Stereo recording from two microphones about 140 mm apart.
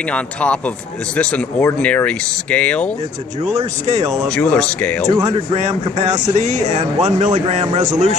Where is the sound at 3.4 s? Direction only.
55° right (ahead or behind).